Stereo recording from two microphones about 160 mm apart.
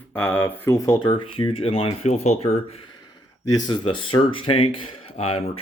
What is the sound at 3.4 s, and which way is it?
Speech, 25° left (ahead or behind).